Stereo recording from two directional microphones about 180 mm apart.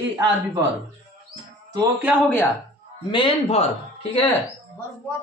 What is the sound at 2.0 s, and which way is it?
Speech, centre (ahead or behind).